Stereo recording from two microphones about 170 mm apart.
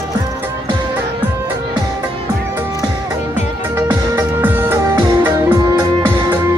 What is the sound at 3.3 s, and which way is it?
Music, 10° right (ahead or behind).